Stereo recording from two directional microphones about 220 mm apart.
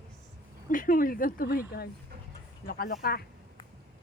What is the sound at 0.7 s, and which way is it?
Speech, 40° left (ahead or behind).